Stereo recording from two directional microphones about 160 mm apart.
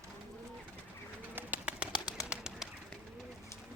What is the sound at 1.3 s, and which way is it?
Bird, 10° right (ahead or behind).